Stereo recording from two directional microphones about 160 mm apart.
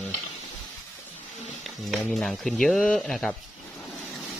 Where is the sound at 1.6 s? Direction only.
Centre (ahead or behind).